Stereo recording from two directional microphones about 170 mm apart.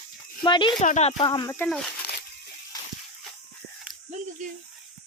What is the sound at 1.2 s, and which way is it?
Speech, 25° left (ahead or behind).